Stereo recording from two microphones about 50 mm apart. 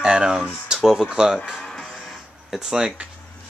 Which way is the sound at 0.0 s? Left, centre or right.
Centre.